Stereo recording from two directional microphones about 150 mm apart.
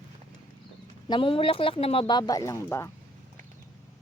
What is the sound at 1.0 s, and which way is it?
Speech, 35° left (ahead or behind).